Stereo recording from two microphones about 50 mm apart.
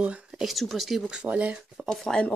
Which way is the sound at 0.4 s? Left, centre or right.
Centre.